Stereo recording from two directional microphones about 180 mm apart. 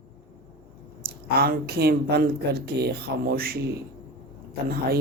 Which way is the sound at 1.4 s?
60° right (ahead or behind).